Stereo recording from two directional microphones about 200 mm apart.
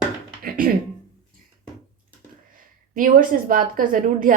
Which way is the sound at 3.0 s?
45° right (ahead or behind).